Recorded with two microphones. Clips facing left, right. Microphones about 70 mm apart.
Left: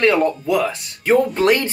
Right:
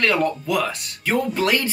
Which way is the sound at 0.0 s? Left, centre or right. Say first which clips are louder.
Left 4 dB; left.